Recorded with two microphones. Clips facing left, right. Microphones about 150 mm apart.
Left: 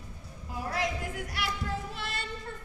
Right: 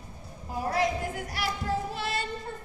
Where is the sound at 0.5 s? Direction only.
40° right (ahead or behind).